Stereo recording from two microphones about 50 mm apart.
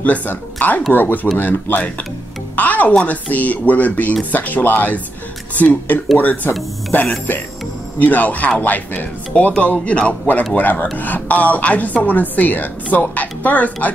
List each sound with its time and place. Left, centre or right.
0.0 s a woman's voice: left
2.5 s music: left
3.1 s a woman's voice: left